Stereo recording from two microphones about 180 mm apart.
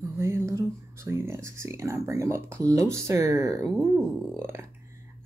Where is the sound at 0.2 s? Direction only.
15° right (ahead or behind).